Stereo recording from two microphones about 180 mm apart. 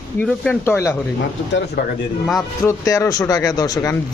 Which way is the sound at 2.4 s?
20° left (ahead or behind).